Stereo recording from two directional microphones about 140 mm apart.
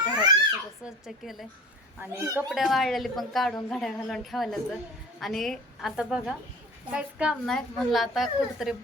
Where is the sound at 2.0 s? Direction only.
20° right (ahead or behind).